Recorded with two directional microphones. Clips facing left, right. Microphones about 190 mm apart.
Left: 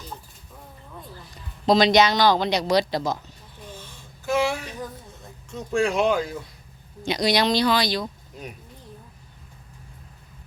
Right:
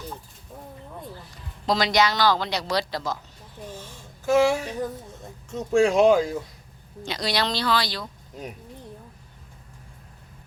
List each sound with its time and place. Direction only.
1.6 s speech: 20° left (ahead or behind)
3.8 s a sound: 45° right (ahead or behind)
5.5 s speech: 25° right (ahead or behind)
5.9 s speech: 40° right (ahead or behind)
7.0 s speech: 15° left (ahead or behind)